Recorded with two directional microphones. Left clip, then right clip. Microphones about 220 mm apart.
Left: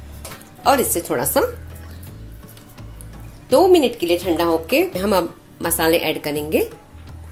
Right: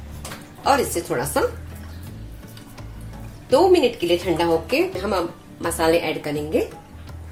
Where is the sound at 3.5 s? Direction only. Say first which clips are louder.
Left 2 dB; 45° left (ahead or behind).